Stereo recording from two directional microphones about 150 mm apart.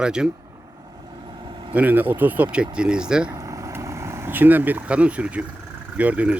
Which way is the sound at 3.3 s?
20° right (ahead or behind).